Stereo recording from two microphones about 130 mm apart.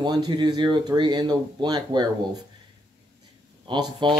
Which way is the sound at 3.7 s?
35° right (ahead or behind).